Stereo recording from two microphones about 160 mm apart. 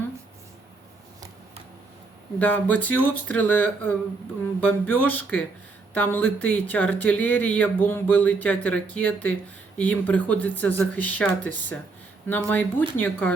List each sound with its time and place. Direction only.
2.4 s speech: 10° left (ahead or behind)